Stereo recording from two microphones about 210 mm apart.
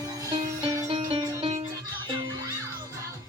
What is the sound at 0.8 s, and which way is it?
Music, 25° right (ahead or behind).